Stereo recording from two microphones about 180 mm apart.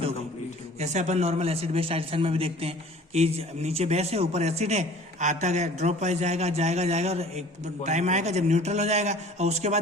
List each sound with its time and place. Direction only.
0.8 s a man's voice: 40° right (ahead or behind)